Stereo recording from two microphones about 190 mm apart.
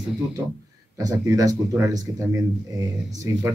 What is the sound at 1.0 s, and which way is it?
Speech, 15° right (ahead or behind).